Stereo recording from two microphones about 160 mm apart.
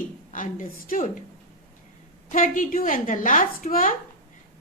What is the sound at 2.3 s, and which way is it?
A woman's voice, 55° left (ahead or behind).